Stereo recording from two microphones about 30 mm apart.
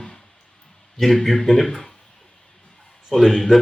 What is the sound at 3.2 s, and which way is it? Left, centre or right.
Speech, centre.